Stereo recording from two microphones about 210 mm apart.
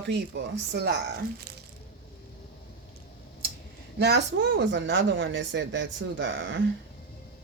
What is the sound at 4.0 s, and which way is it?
Speech, 55° right (ahead or behind).